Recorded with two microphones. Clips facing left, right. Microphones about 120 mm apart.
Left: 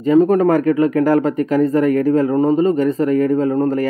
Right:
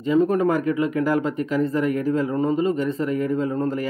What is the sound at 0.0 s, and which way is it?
Speech, 45° left (ahead or behind).